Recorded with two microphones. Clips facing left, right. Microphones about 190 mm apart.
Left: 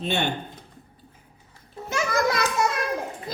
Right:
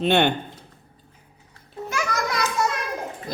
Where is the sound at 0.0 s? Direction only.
65° right (ahead or behind).